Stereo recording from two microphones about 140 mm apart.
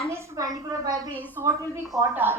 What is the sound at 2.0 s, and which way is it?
Speech, 15° right (ahead or behind).